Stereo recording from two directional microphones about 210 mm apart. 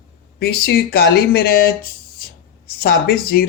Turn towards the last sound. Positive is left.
turn(degrees=50)  # may be behind; listen again after turning